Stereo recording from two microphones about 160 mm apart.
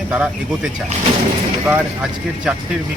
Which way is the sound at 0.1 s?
5° right (ahead or behind).